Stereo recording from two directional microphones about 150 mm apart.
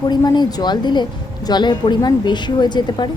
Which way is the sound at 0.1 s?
30° left (ahead or behind).